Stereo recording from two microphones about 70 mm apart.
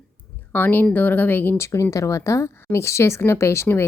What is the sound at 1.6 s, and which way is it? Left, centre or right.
A woman's voice, left.